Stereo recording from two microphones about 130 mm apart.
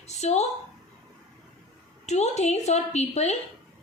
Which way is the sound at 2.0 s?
60° left (ahead or behind).